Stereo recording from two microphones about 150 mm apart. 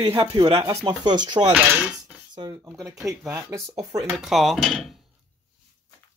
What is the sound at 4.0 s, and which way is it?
Speech, centre (ahead or behind).